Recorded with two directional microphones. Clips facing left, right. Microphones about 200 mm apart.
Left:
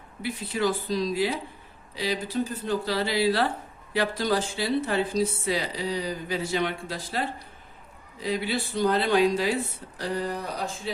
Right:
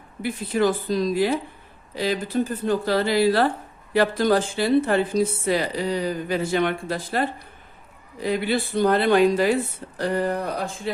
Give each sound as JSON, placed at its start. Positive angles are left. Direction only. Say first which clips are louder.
{"t": 0.2, "sound": "a woman's voice", "louder": "right 5 dB", "side_deg": -50}